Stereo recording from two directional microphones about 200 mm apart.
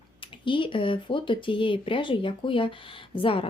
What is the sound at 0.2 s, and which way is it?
Speech, 25° left (ahead or behind).